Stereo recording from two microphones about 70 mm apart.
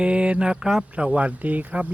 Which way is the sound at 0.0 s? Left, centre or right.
Centre.